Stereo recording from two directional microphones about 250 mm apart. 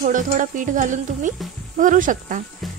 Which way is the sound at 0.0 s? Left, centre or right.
Right.